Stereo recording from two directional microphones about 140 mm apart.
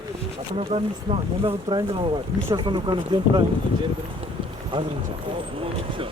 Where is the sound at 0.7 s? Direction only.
45° right (ahead or behind).